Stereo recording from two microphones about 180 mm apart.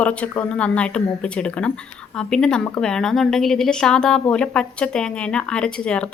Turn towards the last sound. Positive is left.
turn(degrees=5)  # may be behind; listen again after turning